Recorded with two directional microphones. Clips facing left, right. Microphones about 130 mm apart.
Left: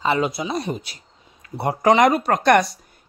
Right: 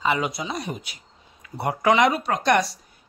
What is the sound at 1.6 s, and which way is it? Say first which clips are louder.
Speech: left 3 dB; 30° left (ahead or behind).